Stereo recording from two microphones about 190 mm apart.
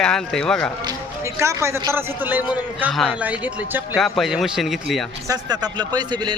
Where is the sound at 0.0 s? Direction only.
5° left (ahead or behind).